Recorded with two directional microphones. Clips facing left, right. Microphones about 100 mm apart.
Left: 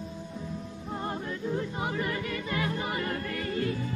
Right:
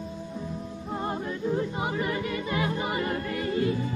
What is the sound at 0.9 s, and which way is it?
Music, 15° right (ahead or behind).